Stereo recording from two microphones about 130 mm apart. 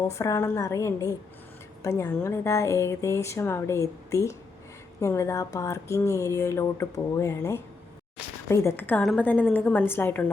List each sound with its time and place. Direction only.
0.1 s a woman's voice: 20° left (ahead or behind)